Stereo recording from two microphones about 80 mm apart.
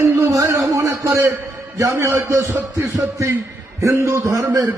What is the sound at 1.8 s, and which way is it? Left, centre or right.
A man's voice, right.